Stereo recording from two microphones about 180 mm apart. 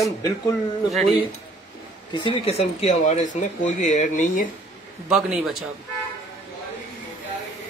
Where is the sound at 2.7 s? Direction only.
40° left (ahead or behind).